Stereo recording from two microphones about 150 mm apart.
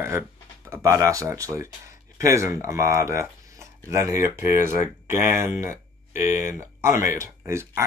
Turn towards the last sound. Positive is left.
turn(degrees=-20)  # may be behind; listen again after turning